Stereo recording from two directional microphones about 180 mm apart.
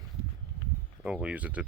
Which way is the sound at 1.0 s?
5° right (ahead or behind).